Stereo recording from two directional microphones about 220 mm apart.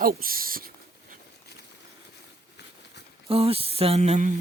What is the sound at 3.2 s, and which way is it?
Speech, 25° right (ahead or behind).